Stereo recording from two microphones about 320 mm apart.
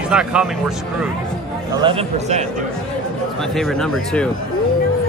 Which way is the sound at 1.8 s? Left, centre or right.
Centre.